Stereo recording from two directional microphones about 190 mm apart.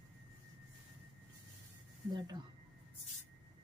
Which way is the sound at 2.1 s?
20° right (ahead or behind).